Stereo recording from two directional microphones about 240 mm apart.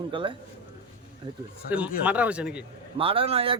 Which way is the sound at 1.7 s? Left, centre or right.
Centre.